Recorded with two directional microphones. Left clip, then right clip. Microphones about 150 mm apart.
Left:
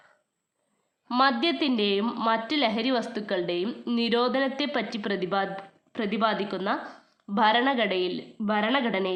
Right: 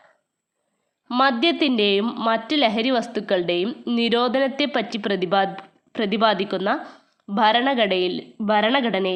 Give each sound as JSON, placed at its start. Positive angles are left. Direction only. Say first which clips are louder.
{"t": 1.2, "sound": "a woman's voice", "louder": "right 5 dB", "side_deg": -35}
{"t": 6.8, "sound": "a woman's voice", "louder": "right 2 dB", "side_deg": -25}